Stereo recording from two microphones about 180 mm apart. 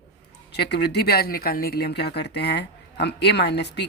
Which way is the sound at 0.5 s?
65° left (ahead or behind).